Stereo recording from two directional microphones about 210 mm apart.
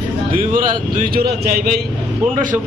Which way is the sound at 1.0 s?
45° right (ahead or behind).